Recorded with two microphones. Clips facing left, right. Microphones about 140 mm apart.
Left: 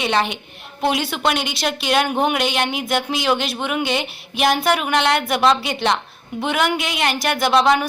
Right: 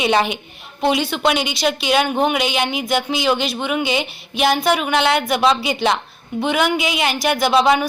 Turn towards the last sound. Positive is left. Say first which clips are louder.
# right 1 dB
turn(degrees=0)  # may be behind; listen again after turning